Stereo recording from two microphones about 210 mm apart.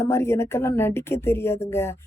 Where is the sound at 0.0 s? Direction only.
15° left (ahead or behind).